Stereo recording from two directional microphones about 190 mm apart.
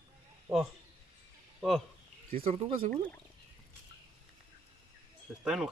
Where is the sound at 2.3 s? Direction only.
30° right (ahead or behind).